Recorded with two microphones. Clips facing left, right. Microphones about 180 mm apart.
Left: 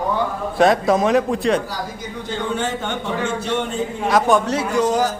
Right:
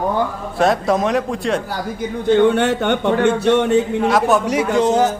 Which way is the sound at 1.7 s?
60° right (ahead or behind).